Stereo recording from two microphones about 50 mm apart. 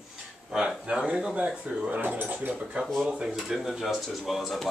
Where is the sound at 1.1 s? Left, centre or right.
Centre; by 2.5 s right.